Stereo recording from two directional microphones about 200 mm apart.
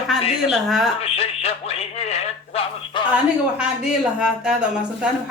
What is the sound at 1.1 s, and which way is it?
Speech, 30° left (ahead or behind).